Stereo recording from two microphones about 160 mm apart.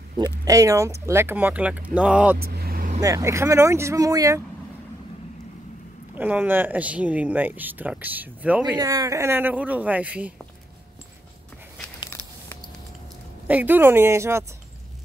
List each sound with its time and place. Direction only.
0.2 s speech: 20° right (ahead or behind)
2.3 s speech: 75° right (ahead or behind)
3.0 s speech: 20° right (ahead or behind)
6.1 s speech: 10° right (ahead or behind)
8.7 s speech: 20° right (ahead or behind)
13.5 s speech: 10° right (ahead or behind)